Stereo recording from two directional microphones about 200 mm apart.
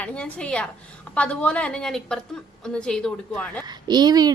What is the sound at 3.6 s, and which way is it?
Speech, 20° right (ahead or behind).